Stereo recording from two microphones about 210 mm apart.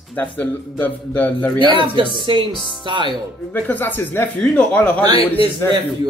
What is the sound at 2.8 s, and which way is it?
Speech, 20° right (ahead or behind).